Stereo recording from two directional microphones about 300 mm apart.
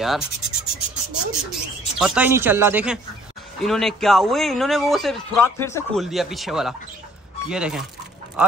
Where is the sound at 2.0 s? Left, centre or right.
Centre.